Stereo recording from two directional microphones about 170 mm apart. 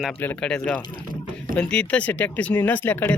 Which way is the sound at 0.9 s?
55° right (ahead or behind).